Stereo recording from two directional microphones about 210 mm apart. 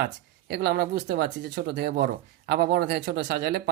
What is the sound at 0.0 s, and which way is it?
Speech, 50° right (ahead or behind).